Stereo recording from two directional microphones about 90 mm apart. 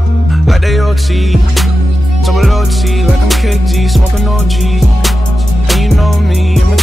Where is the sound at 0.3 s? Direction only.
Centre (ahead or behind).